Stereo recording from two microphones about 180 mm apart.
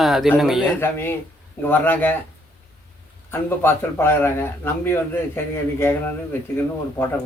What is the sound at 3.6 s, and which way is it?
A man's voice, 15° left (ahead or behind).